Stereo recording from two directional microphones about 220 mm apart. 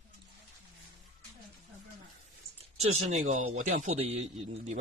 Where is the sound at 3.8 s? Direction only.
30° right (ahead or behind).